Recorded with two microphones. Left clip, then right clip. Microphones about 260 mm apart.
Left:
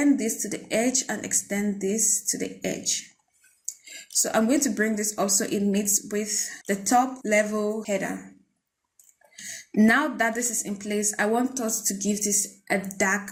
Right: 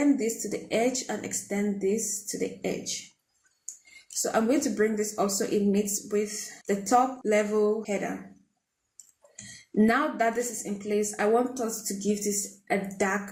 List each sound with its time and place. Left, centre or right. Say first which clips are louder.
0.2 s speech: even; left
4.1 s speech: left 2 dB; left
9.8 s speech: left 3 dB; left